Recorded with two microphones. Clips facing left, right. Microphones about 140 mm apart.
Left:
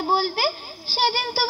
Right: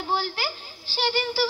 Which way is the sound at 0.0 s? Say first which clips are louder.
Left 6 dB; 40° left (ahead or behind).